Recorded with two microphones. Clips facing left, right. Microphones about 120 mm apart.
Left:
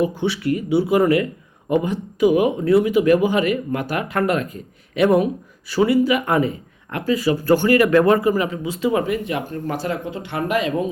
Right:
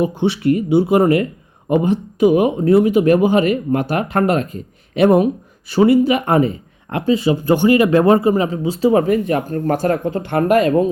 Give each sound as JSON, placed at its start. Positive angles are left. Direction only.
{"t": 0.0, "sound": "speech", "side_deg": -20}
{"t": 3.0, "sound": "speech", "side_deg": -40}